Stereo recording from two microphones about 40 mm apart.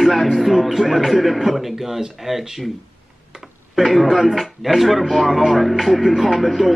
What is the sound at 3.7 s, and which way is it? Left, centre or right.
Music, centre.